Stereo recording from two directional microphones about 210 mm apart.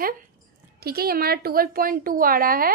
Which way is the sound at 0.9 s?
45° right (ahead or behind).